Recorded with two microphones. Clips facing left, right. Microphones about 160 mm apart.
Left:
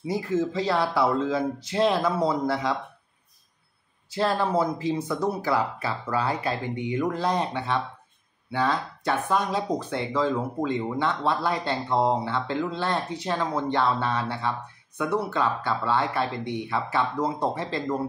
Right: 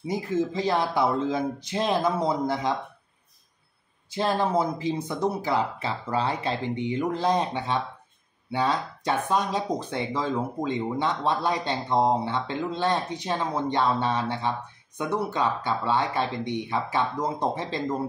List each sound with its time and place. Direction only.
0.0 s speech: 20° right (ahead or behind)
4.2 s speech: 20° right (ahead or behind)